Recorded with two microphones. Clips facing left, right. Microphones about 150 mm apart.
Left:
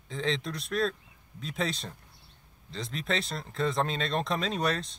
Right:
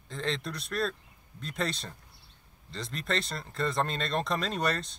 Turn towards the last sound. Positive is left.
turn(degrees=0)  # may be behind; listen again after turning